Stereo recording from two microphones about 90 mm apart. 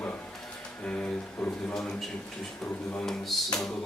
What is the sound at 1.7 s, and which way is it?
Speech, 5° left (ahead or behind).